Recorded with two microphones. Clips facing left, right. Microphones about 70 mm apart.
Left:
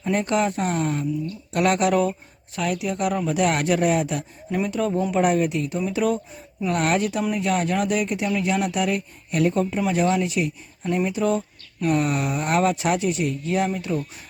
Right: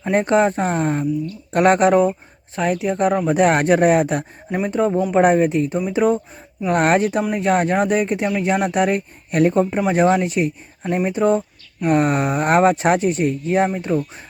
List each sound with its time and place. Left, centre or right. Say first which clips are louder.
0.0 s speech: right 6 dB; right
4.5 s speech: right 4 dB; right